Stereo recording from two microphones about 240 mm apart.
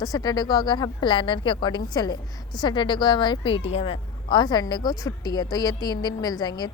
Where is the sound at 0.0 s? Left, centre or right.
Centre.